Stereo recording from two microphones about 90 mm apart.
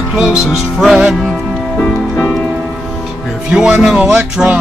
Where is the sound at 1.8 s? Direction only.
20° left (ahead or behind).